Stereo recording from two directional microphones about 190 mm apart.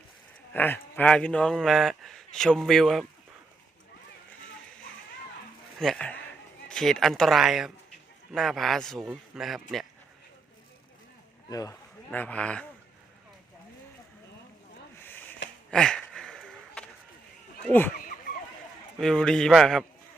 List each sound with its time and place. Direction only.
0.5 s speech: 10° left (ahead or behind)
5.8 s speech: 5° left (ahead or behind)
11.4 s speech: 20° left (ahead or behind)
12.1 s speech: 10° left (ahead or behind)
14.9 s a sound: 10° left (ahead or behind)
17.7 s speech: 10° left (ahead or behind)
18.9 s speech: 5° left (ahead or behind)